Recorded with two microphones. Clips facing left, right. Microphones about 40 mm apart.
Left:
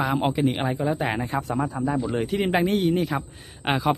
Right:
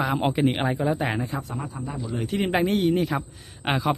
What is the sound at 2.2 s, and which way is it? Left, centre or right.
A man's voice, centre.